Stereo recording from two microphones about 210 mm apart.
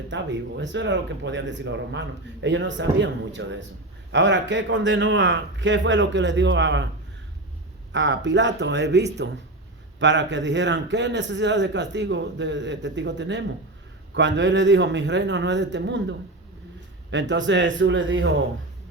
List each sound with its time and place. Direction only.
0.1 s speech: 60° right (ahead or behind)
7.9 s speech: 60° right (ahead or behind)